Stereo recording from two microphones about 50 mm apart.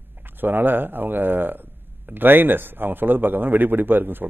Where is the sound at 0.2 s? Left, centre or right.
Right.